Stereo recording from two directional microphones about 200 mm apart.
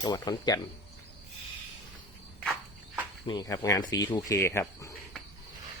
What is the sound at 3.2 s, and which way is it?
Speech, 20° left (ahead or behind).